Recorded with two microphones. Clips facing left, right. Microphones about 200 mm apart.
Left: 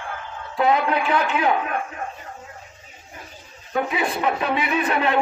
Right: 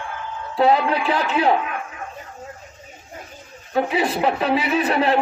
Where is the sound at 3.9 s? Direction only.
35° right (ahead or behind).